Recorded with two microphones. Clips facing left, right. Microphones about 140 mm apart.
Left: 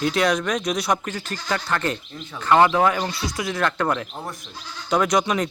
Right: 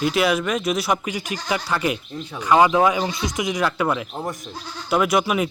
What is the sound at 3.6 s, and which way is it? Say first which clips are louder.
Speech: even; 5° right (ahead or behind).